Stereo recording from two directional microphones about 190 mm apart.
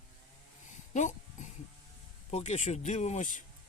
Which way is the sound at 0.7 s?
40° left (ahead or behind).